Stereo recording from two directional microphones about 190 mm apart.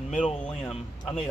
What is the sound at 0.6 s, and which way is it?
Speech, 30° left (ahead or behind).